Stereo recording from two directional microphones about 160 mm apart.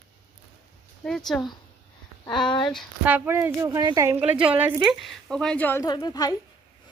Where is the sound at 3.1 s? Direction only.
15° right (ahead or behind).